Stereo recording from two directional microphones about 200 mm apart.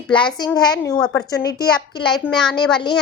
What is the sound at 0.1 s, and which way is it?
A woman's voice, 25° left (ahead or behind).